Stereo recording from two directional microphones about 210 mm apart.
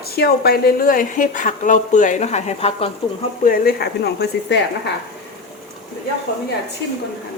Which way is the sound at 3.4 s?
45° left (ahead or behind).